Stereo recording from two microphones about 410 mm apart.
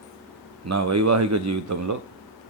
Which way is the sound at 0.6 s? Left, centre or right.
Right.